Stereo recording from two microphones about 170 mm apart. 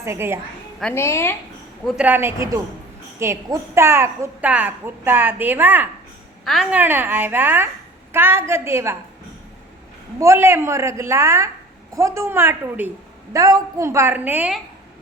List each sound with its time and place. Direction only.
0.0 s a woman's voice: 15° right (ahead or behind)
0.9 s a woman's voice: 15° left (ahead or behind)
1.8 s a woman's voice: 10° right (ahead or behind)
6.4 s a woman's voice: centre (ahead or behind); by 9.0 s 15° right (ahead or behind)
10.2 s a woman's voice: 15° right (ahead or behind)